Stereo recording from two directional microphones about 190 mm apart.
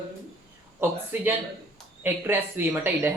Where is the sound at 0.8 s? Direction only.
10° right (ahead or behind).